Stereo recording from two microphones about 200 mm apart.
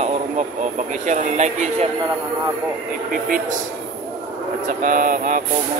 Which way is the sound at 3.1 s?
45° right (ahead or behind).